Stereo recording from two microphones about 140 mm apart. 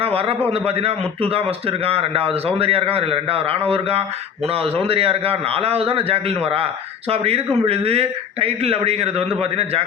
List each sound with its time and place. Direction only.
0.0 s a man's voice: 40° right (ahead or behind)